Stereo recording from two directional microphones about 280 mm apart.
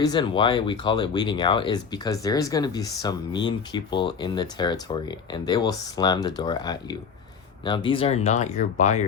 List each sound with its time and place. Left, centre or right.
0.0 s speech: centre